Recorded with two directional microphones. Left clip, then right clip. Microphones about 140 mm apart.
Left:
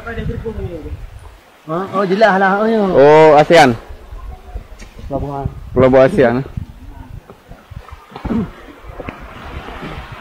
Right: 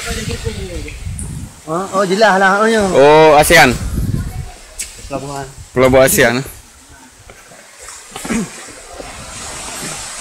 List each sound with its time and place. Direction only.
1.7 s speech: 70° right (ahead or behind); by 3.0 s 50° right (ahead or behind)
3.0 s speech: 25° right (ahead or behind)
5.8 s speech: 20° right (ahead or behind)